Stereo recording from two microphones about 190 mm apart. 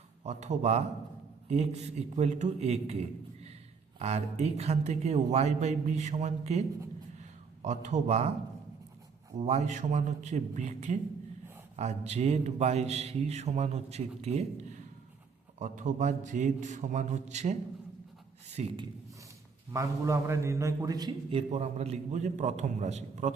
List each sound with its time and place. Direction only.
0.3 s a man's voice: 35° right (ahead or behind)
3.9 s a man's voice: 35° right (ahead or behind)
9.4 s a man's voice: 35° right (ahead or behind)
19.7 s a man's voice: 15° right (ahead or behind); by 23.3 s 35° right (ahead or behind)